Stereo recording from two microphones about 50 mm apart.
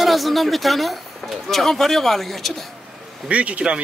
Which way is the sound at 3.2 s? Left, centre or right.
Right.